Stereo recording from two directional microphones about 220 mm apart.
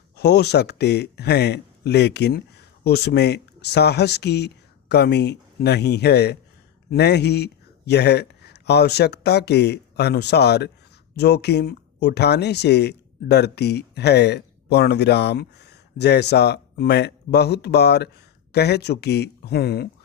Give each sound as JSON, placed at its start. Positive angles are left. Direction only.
{"t": 0.2, "sound": "speech", "side_deg": 50}